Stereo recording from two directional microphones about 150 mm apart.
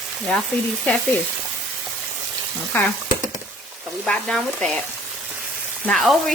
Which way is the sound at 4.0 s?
Centre (ahead or behind).